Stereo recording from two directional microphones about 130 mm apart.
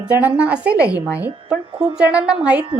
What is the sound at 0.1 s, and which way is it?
A woman's voice, 10° right (ahead or behind).